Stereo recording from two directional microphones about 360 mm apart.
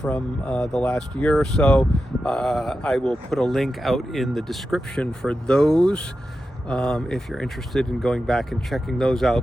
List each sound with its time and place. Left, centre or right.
0.0 s speech: centre